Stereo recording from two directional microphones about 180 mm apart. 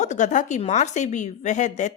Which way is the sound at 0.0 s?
40° left (ahead or behind).